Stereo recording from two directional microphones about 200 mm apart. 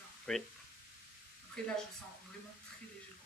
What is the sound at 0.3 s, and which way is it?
Speech, 5° left (ahead or behind).